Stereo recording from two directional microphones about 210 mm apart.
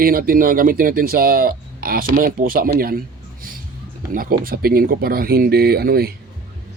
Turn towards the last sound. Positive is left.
turn(degrees=-45)  # may be behind; listen again after turning